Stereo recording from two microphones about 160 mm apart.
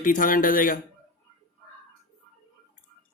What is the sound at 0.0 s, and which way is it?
Speech, 55° left (ahead or behind).